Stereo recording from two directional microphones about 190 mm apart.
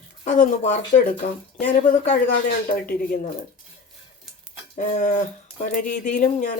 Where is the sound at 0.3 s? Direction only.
40° left (ahead or behind).